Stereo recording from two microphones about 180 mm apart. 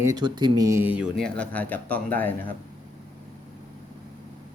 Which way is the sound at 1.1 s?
5° left (ahead or behind).